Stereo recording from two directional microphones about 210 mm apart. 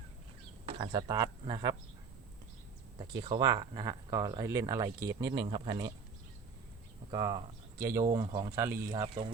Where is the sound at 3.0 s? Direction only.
20° right (ahead or behind).